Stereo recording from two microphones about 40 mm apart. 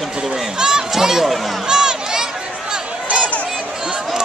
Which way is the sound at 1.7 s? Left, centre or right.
Centre.